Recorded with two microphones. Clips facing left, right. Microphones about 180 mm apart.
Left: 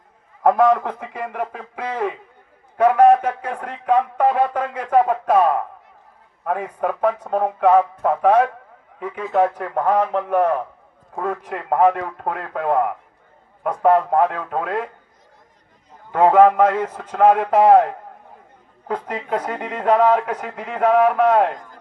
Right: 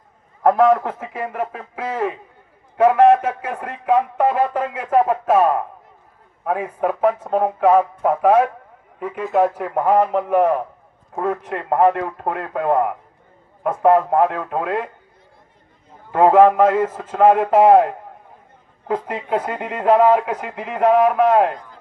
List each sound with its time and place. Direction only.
0.4 s a man's voice: centre (ahead or behind)
16.1 s a man's voice: 5° right (ahead or behind)
21.5 s speech: 45° left (ahead or behind)